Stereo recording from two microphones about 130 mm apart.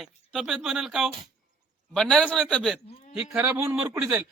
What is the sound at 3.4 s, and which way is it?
Speech, 20° right (ahead or behind).